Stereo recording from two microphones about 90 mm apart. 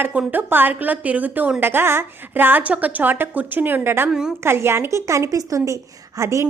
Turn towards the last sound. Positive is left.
turn(degrees=-35)  # may be behind; listen again after turning